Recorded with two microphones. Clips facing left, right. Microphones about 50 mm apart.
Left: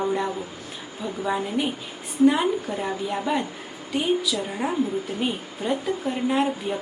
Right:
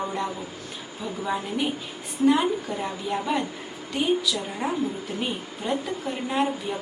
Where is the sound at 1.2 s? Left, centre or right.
Centre.